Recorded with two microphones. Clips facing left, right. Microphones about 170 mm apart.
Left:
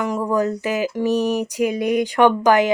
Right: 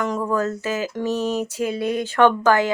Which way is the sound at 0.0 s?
10° left (ahead or behind).